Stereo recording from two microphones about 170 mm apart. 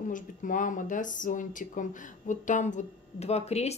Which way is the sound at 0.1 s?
50° left (ahead or behind).